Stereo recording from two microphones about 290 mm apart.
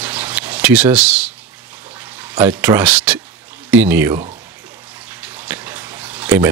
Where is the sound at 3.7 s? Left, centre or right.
Centre.